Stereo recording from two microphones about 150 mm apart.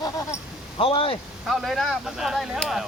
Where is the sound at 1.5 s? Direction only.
Centre (ahead or behind).